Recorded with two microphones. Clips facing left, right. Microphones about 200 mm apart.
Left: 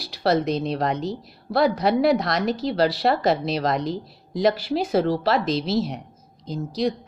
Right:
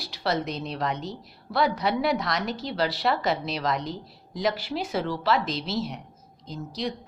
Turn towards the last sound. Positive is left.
turn(degrees=35)  # may be behind; listen again after turning